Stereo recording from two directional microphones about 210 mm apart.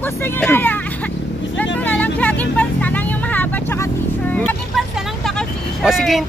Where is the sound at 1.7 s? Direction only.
10° left (ahead or behind).